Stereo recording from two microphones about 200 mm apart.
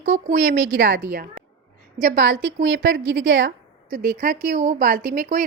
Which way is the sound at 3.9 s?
45° right (ahead or behind).